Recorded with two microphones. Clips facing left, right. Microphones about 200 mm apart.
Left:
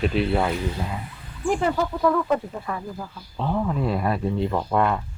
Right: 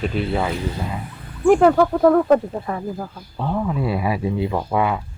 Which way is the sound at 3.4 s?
5° right (ahead or behind).